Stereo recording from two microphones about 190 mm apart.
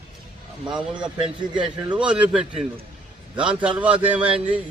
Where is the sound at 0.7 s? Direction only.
5° right (ahead or behind).